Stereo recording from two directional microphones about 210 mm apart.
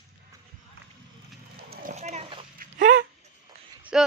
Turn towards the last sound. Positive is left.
turn(degrees=-5)  # may be behind; listen again after turning